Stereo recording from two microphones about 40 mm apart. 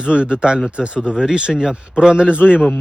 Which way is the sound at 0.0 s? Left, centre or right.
Right.